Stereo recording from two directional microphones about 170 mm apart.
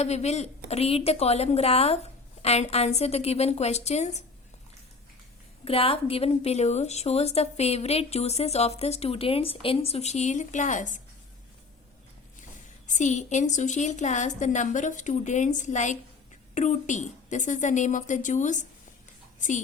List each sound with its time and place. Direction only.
0.0 s a woman's voice: 40° left (ahead or behind)
5.6 s a woman's voice: 35° left (ahead or behind)
12.9 s a woman's voice: 45° left (ahead or behind)